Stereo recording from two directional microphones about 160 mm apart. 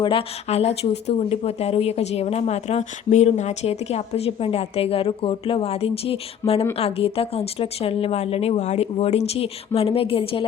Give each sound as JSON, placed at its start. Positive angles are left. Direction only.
{"t": 0.0, "sound": "speech", "side_deg": 35}